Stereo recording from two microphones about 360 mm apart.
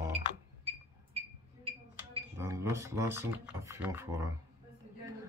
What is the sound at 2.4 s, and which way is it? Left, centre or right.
Speech, centre.